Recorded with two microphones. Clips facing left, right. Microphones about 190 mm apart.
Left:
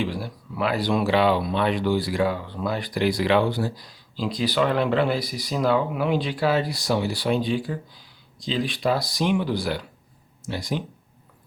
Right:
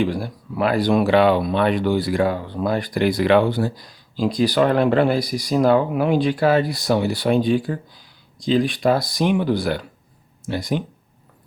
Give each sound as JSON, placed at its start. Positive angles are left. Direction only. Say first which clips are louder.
{"t": 0.0, "sound": "speech", "louder": "right 6 dB", "side_deg": -50}